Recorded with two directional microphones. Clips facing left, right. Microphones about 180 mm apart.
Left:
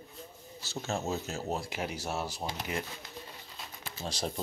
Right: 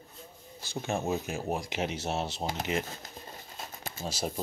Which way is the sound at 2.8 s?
45° right (ahead or behind).